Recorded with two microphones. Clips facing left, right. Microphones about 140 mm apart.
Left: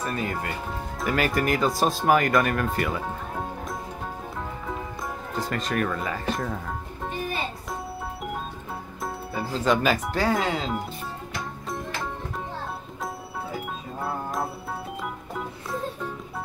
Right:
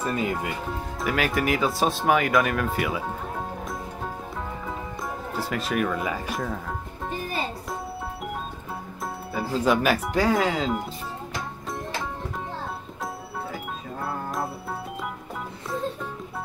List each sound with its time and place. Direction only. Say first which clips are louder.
0.0 s speech: right 2 dB; 20° right (ahead or behind)
1.0 s speech: even; centre (ahead or behind)
5.3 s speech: even; 5° right (ahead or behind)
9.0 s music: even; 5° right (ahead or behind)
10.3 s speech: right 2 dB; centre (ahead or behind)
14.0 s music: left 1 dB; centre (ahead or behind)